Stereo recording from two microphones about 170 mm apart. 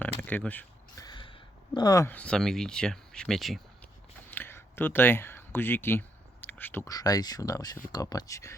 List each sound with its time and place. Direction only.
0.0 s keys jangling: 10° left (ahead or behind)
0.9 s a sound: 25° left (ahead or behind)
2.1 s speech: 5° left (ahead or behind)
4.3 s speech: 10° left (ahead or behind)